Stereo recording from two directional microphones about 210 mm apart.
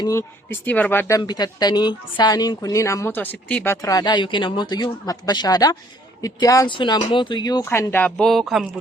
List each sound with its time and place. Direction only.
0.0 s speech: 15° left (ahead or behind)